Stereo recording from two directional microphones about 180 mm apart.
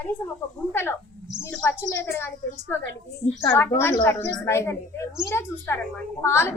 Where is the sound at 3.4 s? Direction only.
15° left (ahead or behind).